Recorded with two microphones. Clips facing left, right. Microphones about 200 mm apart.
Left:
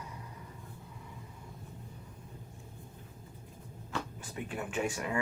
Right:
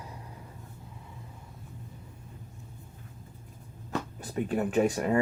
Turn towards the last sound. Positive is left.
turn(degrees=-35)  # may be behind; listen again after turning